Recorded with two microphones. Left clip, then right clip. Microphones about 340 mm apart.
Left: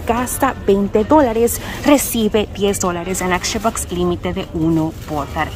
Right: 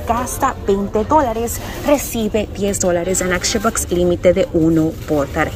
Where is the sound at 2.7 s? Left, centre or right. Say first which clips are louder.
Right 3 dB; centre.